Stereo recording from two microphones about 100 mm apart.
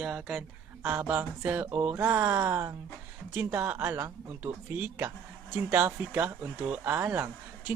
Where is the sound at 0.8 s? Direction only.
20° right (ahead or behind).